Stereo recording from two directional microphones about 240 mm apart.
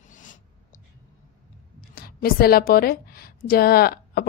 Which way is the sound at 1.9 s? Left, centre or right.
Left.